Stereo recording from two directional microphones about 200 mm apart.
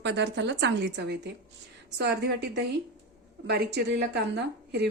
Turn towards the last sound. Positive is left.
turn(degrees=-55)  # may be behind; listen again after turning